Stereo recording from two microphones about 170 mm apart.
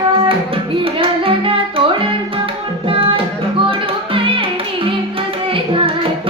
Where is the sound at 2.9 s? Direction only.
30° right (ahead or behind).